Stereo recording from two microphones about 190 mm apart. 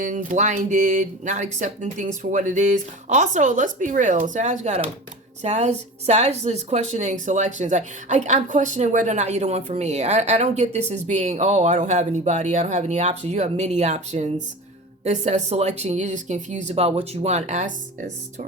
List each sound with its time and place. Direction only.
0.0 s a woman's voice: 45° right (ahead or behind)